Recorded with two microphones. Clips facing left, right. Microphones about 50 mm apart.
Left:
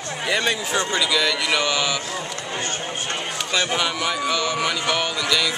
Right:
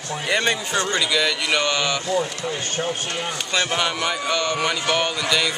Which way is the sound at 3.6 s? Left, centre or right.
Centre.